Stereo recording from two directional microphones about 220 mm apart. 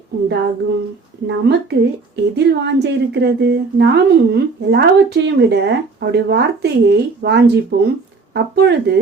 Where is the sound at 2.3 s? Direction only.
50° right (ahead or behind).